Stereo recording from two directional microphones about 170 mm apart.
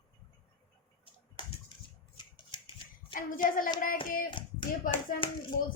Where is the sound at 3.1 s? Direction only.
55° left (ahead or behind).